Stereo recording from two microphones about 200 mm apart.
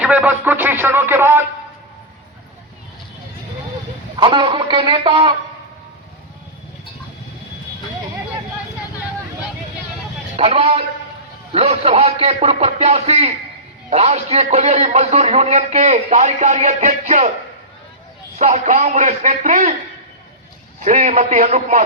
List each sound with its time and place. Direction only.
0.0 s a sound: 5° right (ahead or behind)
4.2 s speech: 25° right (ahead or behind)
10.3 s a man's voice: 30° right (ahead or behind)
18.3 s a man's voice: 35° right (ahead or behind)
20.8 s a man's voice: 40° right (ahead or behind)